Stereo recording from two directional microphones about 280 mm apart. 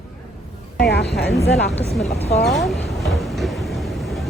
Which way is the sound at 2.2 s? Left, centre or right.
Left.